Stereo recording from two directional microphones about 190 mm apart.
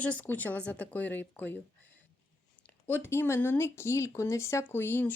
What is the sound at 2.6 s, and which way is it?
Speech, 10° left (ahead or behind).